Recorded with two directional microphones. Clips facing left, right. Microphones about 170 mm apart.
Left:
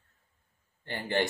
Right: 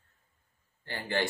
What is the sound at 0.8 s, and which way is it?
Speech, 20° left (ahead or behind).